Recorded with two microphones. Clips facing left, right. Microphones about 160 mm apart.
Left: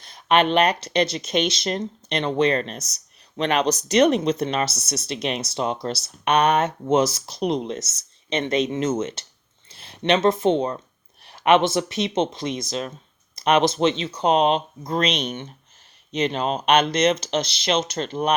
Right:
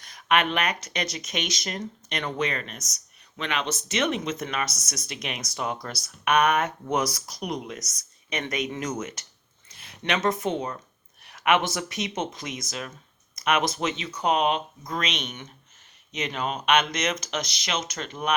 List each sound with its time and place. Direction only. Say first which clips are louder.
0.0 s speech: left 5 dB; 30° left (ahead or behind)